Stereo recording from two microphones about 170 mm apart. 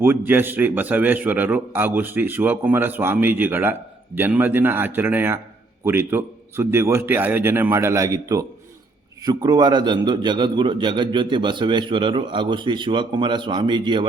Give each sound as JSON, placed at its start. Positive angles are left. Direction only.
{"t": 0.0, "sound": "a man's voice", "side_deg": -10}